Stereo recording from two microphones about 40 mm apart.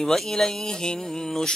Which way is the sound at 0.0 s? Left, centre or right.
Centre.